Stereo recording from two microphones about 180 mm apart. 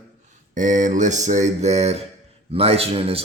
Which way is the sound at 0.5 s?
45° right (ahead or behind).